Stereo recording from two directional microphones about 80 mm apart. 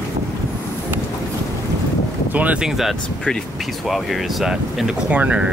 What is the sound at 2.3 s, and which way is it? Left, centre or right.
Speech, centre.